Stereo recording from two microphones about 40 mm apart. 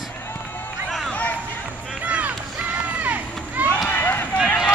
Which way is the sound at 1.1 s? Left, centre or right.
Left.